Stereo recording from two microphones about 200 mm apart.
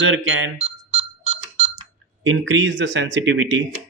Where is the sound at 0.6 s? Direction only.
30° right (ahead or behind).